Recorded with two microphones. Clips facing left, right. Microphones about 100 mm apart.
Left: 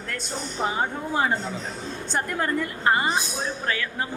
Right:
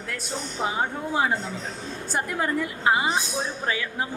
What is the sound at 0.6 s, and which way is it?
A woman's voice, 5° right (ahead or behind).